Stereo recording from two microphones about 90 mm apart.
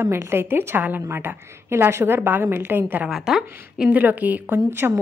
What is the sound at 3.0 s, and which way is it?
Speech, 5° right (ahead or behind).